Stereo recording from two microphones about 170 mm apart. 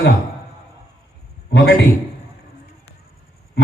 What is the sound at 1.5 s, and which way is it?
Speech, 90° left.